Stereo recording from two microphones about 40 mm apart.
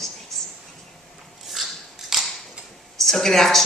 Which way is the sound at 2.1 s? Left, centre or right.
Centre.